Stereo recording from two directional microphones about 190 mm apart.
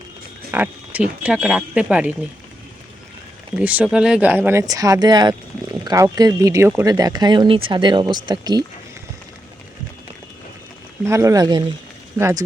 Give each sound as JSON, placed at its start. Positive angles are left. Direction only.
{"t": 0.5, "sound": "a sound", "side_deg": -10}
{"t": 1.2, "sound": "speech", "side_deg": -5}
{"t": 3.6, "sound": "speech", "side_deg": -5}
{"t": 11.0, "sound": "speech", "side_deg": -15}